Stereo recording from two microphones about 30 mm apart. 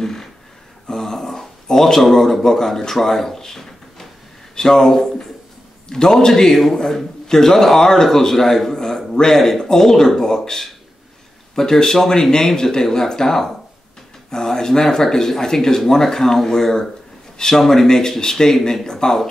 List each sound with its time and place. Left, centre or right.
0.0 s a sound: centre
0.8 s speech: centre
4.6 s a man's voice: left
8.7 s a sound: centre
9.3 s speech: centre
9.6 s a man's voice: centre